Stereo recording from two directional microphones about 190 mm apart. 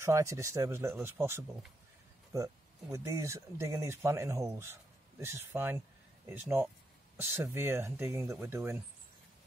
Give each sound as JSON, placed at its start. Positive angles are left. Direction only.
{"t": 0.0, "sound": "speech", "side_deg": -15}